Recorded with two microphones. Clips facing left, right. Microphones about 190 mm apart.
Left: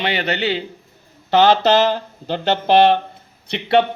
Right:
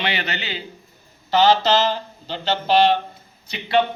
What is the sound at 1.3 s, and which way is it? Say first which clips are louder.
A man's voice: left 3 dB; 60° left (ahead or behind).